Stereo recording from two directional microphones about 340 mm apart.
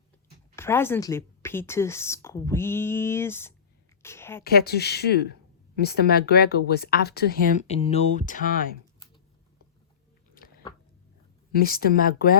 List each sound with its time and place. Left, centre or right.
0.5 s speech: centre
4.0 s a sound: centre
4.4 s speech: left
11.5 s speech: left